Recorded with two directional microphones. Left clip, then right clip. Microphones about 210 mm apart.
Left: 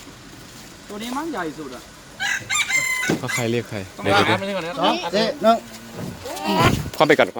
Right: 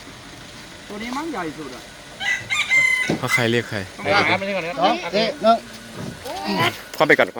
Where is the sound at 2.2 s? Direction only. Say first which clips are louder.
Even; 45° left (ahead or behind).